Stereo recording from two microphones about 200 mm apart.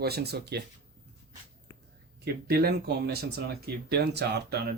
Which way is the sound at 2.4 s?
50° right (ahead or behind).